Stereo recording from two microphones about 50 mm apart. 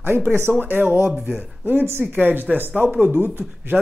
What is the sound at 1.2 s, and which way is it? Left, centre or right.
Speech, right.